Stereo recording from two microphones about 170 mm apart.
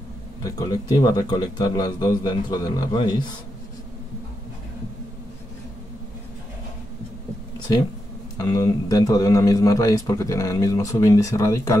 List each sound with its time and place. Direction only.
0.4 s a man's voice: 20° left (ahead or behind)
8.4 s a man's voice: 20° left (ahead or behind)